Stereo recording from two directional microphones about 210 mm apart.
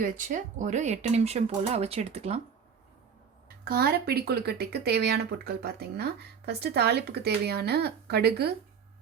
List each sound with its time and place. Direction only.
0.0 s speech: 40° right (ahead or behind)
3.6 s speech: 45° right (ahead or behind)